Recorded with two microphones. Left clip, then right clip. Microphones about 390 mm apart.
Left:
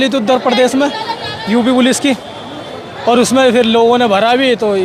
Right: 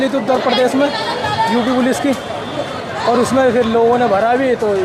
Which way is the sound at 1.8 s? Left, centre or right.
Left.